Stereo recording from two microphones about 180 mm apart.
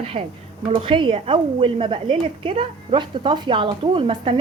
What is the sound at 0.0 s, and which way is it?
A woman's voice, 35° right (ahead or behind).